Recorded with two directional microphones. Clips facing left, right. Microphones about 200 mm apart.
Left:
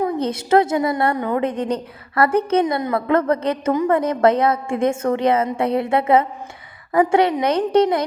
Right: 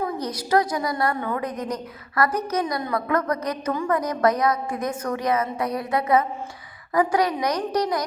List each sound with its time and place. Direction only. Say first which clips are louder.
0.0 s a woman's voice: left 6 dB; 25° left (ahead or behind)